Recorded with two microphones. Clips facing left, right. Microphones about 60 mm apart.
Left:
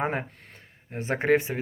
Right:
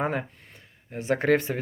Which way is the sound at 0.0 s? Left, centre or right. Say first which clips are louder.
Right 1 dB; left.